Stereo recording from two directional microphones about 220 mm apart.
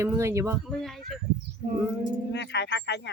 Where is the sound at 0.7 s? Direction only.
Centre (ahead or behind).